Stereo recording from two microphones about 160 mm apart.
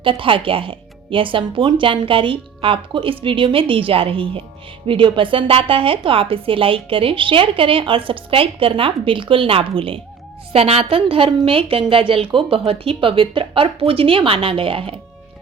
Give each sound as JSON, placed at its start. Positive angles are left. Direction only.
{"t": 0.0, "sound": "a woman's voice", "side_deg": -35}